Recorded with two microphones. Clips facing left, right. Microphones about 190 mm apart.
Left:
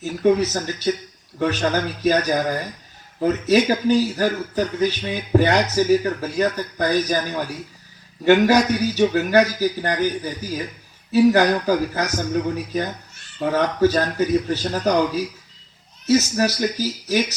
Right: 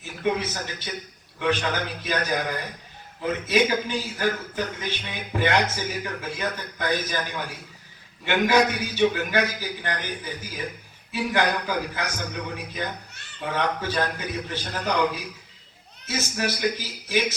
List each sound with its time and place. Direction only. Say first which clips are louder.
0.0 s a man's voice: left 8 dB; 40° left (ahead or behind)